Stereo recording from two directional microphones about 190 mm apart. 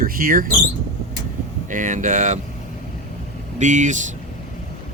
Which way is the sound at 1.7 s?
40° right (ahead or behind).